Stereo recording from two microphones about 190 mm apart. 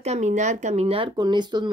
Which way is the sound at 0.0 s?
35° right (ahead or behind).